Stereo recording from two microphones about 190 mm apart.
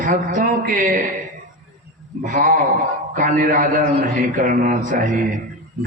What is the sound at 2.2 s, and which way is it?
A man's voice, 45° right (ahead or behind).